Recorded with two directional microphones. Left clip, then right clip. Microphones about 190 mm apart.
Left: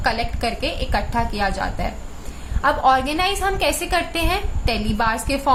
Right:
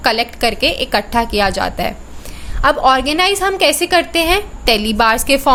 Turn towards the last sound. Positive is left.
turn(degrees=-50)  # may be behind; listen again after turning